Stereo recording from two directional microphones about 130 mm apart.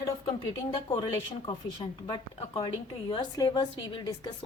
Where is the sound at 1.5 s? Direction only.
40° left (ahead or behind).